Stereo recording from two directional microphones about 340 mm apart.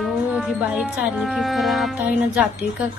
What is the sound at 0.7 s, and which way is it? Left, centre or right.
Speech, centre.